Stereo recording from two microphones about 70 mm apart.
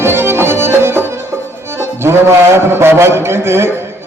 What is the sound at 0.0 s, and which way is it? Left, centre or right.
Music, right.